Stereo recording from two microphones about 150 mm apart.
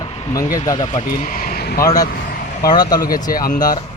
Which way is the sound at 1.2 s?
70° left (ahead or behind).